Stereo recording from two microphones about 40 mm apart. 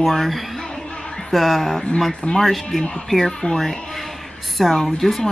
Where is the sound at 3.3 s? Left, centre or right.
Centre.